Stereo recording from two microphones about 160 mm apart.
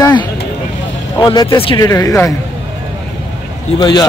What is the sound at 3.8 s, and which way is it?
Speech, 25° left (ahead or behind).